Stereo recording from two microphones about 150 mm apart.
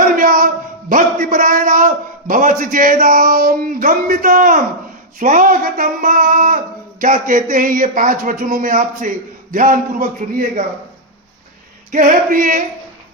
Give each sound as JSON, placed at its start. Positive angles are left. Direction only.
{"t": 0.2, "sound": "a man's voice", "side_deg": -65}
{"t": 11.9, "sound": "a man's voice", "side_deg": -60}